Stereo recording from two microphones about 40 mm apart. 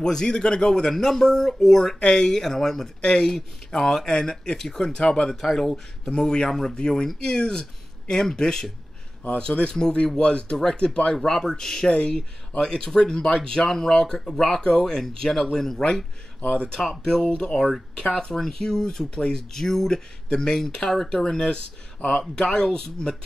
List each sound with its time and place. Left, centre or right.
0.0 s speech: centre
2.0 s speech: left
5.3 s speech: centre
11.2 s speech: centre
12.1 s speech: centre
17.0 s speech: centre
22.0 s speech: left
22.4 s speech: centre